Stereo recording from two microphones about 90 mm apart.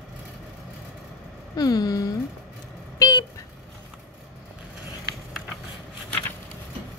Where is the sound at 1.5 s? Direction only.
45° left (ahead or behind).